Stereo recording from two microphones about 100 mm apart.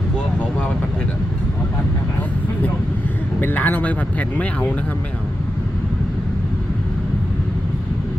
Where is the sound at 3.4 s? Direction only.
15° left (ahead or behind).